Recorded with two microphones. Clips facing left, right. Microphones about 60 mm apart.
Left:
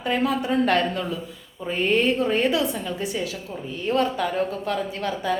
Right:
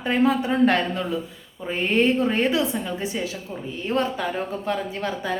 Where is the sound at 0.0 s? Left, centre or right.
Right.